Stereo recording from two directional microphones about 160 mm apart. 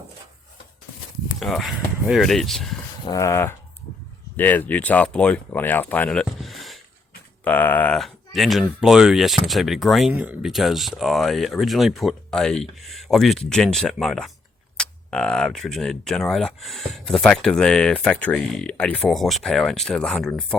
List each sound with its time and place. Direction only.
1.4 s speech: centre (ahead or behind)
3.0 s a sound: 20° left (ahead or behind)
4.4 s speech: 10° left (ahead or behind)
7.4 s speech: 10° left (ahead or behind)